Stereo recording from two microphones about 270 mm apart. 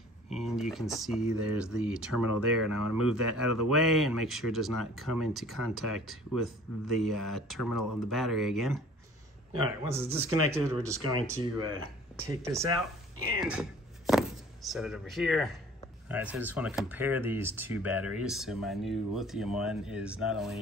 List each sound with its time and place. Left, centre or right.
0.3 s speech: centre
13.4 s a sound: centre
16.1 s speech: centre